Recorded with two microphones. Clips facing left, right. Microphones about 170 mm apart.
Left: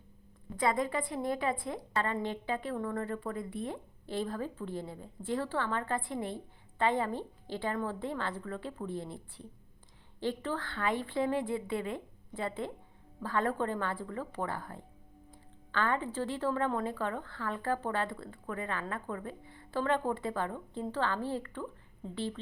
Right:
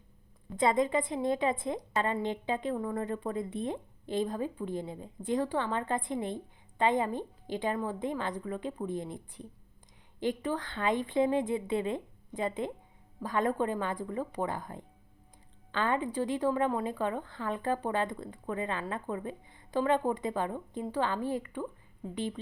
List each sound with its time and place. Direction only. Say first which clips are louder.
0.5 s a woman's voice: right 4 dB; 20° right (ahead or behind)